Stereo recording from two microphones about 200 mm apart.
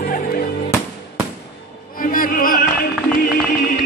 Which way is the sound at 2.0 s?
45° left (ahead or behind).